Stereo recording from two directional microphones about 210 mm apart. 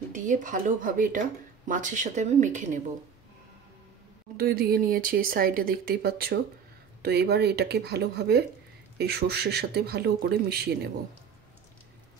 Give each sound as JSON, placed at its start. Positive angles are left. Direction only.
{"t": 0.1, "sound": "speech", "side_deg": -35}
{"t": 4.4, "sound": "speech", "side_deg": -45}